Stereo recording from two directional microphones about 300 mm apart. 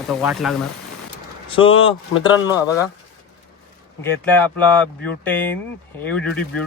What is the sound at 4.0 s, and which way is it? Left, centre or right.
Speech, centre.